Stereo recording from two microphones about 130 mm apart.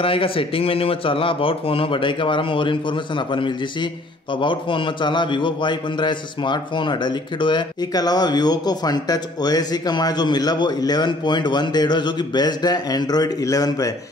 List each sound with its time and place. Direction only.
0.0 s a man's voice: 45° left (ahead or behind); by 13.9 s 25° left (ahead or behind)